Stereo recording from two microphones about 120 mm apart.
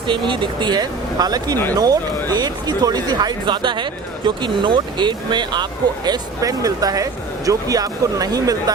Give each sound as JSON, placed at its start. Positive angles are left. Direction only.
{"t": 0.1, "sound": "speech", "side_deg": -45}